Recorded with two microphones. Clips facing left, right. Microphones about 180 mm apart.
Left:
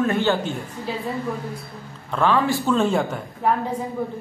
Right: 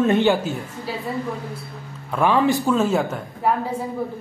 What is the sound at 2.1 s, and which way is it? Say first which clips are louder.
Speech: right 2 dB; 15° right (ahead or behind).